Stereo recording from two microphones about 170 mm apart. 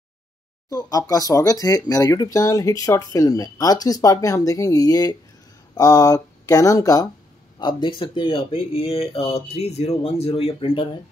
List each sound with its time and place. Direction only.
0.7 s speech: 20° left (ahead or behind)